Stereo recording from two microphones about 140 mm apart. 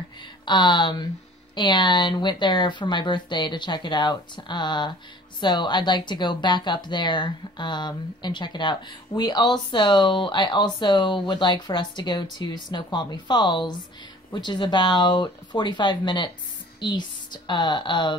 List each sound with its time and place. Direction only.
0.5 s a woman's voice: 35° left (ahead or behind)